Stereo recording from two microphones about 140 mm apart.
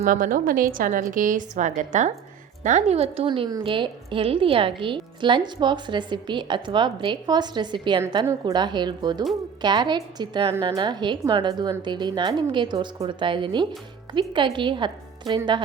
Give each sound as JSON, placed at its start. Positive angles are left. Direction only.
{"t": 0.0, "sound": "a woman's voice", "side_deg": -75}
{"t": 0.7, "sound": "a woman's voice", "side_deg": -75}
{"t": 3.2, "sound": "a woman's voice", "side_deg": -35}